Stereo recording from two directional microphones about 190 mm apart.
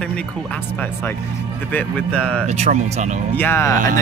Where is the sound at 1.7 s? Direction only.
5° left (ahead or behind).